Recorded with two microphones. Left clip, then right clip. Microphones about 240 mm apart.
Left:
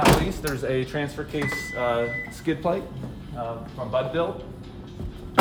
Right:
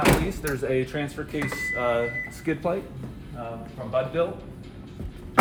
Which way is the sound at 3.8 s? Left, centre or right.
Centre.